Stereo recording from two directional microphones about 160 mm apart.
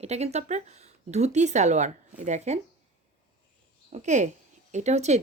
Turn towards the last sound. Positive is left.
turn(degrees=-45)  # may be behind; listen again after turning